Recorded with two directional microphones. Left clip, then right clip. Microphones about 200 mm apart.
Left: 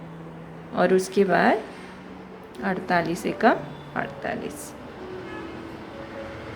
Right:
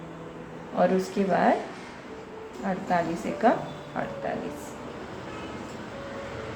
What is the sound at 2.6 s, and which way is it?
A woman's voice, 45° left (ahead or behind).